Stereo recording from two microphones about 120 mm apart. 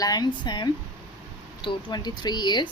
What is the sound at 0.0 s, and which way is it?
A woman's voice, 35° left (ahead or behind).